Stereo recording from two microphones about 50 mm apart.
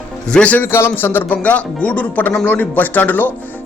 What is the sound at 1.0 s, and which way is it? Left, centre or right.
Speech, left.